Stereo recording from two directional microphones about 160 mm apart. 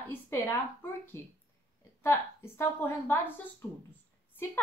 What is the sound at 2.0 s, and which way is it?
A woman's voice, 15° left (ahead or behind).